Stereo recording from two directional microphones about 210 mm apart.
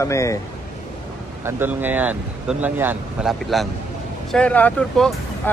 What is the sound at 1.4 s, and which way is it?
Speech, 10° right (ahead or behind).